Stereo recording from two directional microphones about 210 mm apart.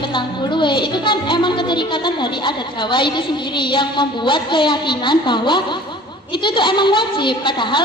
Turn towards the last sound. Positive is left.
turn(degrees=20)  # may be behind; listen again after turning